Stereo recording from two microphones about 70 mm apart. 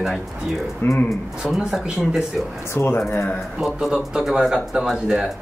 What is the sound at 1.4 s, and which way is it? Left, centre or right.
Speech, centre.